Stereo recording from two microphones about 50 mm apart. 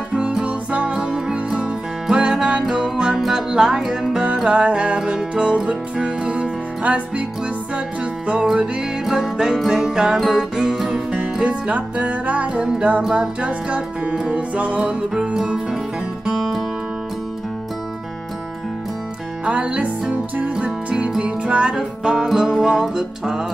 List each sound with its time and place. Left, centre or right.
0.1 s music: centre
9.0 s music: centre
11.4 s music: right
16.3 s music: centre
19.4 s music: right